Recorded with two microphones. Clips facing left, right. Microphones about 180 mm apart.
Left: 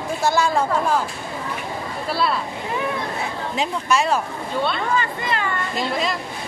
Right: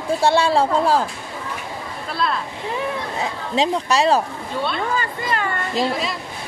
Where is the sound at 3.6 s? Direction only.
35° right (ahead or behind).